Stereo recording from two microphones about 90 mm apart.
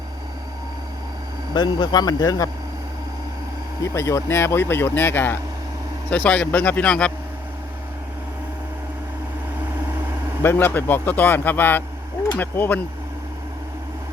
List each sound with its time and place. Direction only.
1.5 s speech: 55° left (ahead or behind)
3.9 s speech: 30° left (ahead or behind); by 7.1 s 10° left (ahead or behind)
10.4 s speech: 25° left (ahead or behind)